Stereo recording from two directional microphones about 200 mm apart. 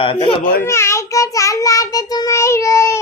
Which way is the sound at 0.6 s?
15° left (ahead or behind).